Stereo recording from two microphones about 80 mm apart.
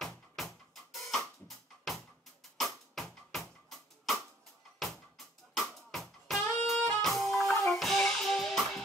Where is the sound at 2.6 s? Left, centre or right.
Centre.